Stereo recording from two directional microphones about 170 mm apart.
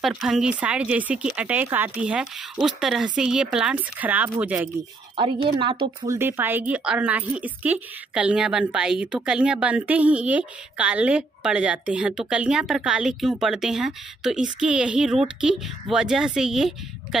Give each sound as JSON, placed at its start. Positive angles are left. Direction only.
{"t": 0.0, "sound": "speech", "side_deg": 0}
{"t": 5.1, "sound": "a woman's voice", "side_deg": -30}
{"t": 6.0, "sound": "a woman's voice", "side_deg": -15}